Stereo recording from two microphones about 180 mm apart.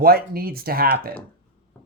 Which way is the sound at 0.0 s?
55° right (ahead or behind).